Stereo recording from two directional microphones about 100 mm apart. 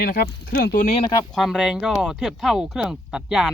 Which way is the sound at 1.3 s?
Centre (ahead or behind).